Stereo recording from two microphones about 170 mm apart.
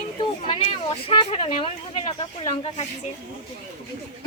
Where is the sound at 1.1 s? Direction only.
35° left (ahead or behind).